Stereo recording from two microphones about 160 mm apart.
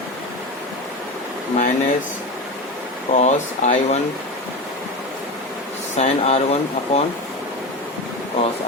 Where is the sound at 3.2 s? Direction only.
45° left (ahead or behind).